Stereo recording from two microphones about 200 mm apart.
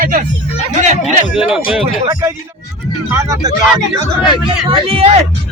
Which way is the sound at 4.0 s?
25° left (ahead or behind).